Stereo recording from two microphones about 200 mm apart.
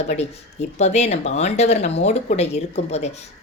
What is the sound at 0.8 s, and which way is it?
A woman's voice, 35° left (ahead or behind).